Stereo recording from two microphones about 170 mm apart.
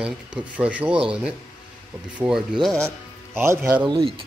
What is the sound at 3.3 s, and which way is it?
Speech, 15° right (ahead or behind).